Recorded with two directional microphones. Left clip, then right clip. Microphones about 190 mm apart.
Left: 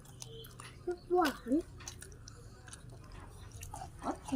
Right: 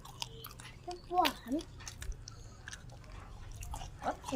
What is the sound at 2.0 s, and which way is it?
Chewing, 15° right (ahead or behind).